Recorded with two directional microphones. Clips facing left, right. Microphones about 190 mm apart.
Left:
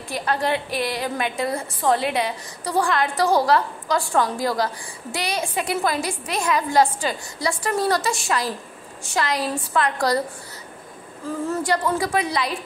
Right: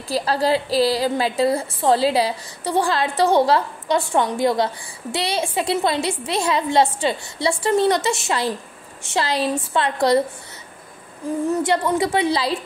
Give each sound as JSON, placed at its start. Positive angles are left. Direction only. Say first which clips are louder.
{"t": 0.1, "sound": "a woman's voice", "louder": "right 4 dB", "side_deg": -30}
{"t": 11.4, "sound": "a woman's voice", "louder": "right 2 dB", "side_deg": -25}